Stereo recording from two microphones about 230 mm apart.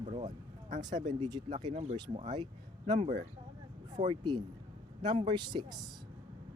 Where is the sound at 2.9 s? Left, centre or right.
Right.